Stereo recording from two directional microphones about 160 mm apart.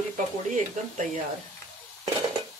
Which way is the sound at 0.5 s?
55° right (ahead or behind).